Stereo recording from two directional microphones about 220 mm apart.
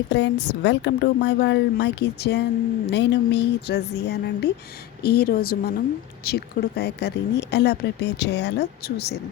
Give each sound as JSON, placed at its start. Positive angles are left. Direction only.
{"t": 0.1, "sound": "speech", "side_deg": 50}